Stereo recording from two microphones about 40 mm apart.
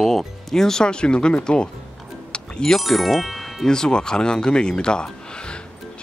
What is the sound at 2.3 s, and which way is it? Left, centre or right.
Music, centre.